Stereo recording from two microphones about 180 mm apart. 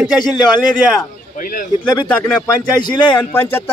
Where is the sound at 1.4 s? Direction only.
50° left (ahead or behind).